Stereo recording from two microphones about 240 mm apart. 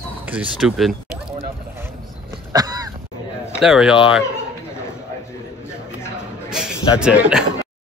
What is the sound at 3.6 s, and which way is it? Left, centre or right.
Speech, centre.